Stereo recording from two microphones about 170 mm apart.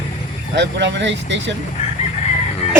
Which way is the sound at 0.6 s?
90° right.